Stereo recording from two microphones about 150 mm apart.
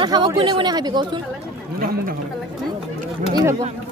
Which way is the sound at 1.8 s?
75° right (ahead or behind).